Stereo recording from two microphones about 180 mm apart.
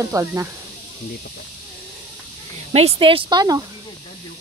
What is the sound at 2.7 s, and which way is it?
Speech, 35° right (ahead or behind).